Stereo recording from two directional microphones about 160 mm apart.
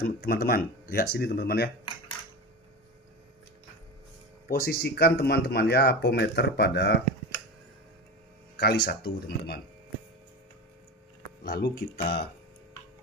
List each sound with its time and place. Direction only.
0.0 s speech: 70° left (ahead or behind); by 1.7 s 90° left
4.5 s speech: 75° left (ahead or behind); by 7.0 s 90° left
8.5 s speech: 80° left
11.4 s speech: 70° left (ahead or behind)